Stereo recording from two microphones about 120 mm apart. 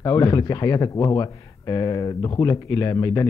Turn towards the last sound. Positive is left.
turn(degrees=25)  # may be behind; listen again after turning